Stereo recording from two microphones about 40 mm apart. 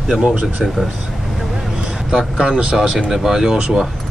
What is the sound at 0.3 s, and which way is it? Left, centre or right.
Speech, right.